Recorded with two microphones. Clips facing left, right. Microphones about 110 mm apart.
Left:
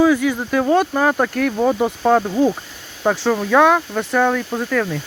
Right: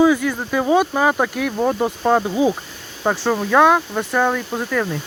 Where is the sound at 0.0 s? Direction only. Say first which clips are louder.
Even; centre (ahead or behind).